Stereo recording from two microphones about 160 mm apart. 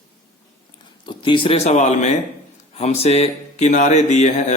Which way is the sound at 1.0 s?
30° left (ahead or behind).